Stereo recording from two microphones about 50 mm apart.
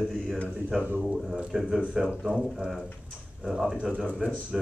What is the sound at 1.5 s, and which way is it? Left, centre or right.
Speech, centre.